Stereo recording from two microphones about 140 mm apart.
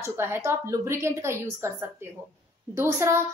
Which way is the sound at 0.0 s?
20° right (ahead or behind).